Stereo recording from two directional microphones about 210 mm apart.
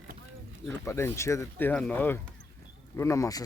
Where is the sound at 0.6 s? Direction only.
10° left (ahead or behind).